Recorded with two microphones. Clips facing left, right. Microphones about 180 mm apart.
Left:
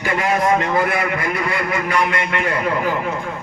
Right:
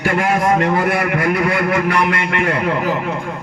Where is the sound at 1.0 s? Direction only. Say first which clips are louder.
Right 5 dB; 65° right (ahead or behind).